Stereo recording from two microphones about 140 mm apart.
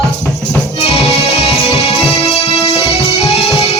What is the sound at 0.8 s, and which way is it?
Music, 50° left (ahead or behind).